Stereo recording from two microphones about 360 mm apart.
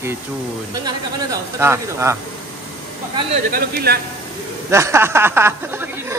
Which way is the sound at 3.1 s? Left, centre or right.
Right.